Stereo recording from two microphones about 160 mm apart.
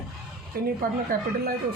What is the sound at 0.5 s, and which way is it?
Speech, 65° right (ahead or behind).